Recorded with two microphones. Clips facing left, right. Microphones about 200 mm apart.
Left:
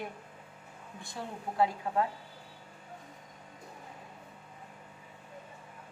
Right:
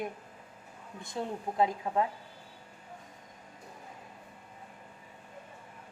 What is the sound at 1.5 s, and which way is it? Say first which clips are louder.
Speech: even; 20° right (ahead or behind).